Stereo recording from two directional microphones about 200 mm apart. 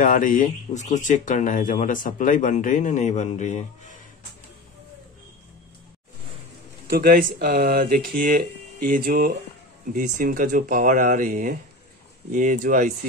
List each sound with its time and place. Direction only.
0.0 s speech: 40° left (ahead or behind)
6.9 s speech: 50° right (ahead or behind)